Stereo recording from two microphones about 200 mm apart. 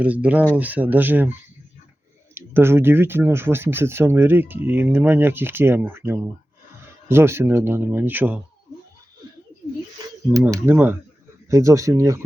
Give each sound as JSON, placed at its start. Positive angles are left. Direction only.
{"t": 0.0, "sound": "speech", "side_deg": -5}
{"t": 10.3, "sound": "speech", "side_deg": -15}